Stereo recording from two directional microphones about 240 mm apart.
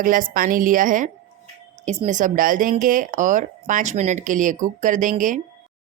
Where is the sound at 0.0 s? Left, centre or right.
Right.